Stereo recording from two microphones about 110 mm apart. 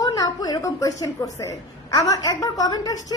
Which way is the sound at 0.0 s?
35° left (ahead or behind).